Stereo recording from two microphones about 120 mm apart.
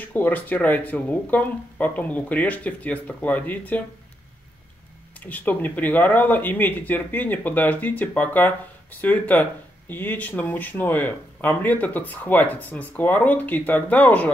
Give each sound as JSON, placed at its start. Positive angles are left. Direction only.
{"t": 0.0, "sound": "speech", "side_deg": 15}
{"t": 5.2, "sound": "speech", "side_deg": 15}